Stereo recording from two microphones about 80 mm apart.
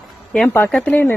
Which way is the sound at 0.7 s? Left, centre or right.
Centre.